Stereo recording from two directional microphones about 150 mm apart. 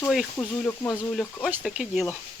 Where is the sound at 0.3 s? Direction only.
15° left (ahead or behind).